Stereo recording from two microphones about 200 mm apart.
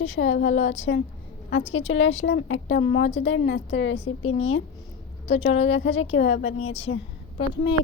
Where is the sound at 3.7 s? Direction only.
85° left.